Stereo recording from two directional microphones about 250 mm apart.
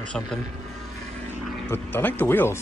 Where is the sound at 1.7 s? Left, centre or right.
Centre.